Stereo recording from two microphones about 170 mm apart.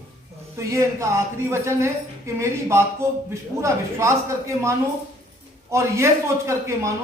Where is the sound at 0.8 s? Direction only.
15° right (ahead or behind).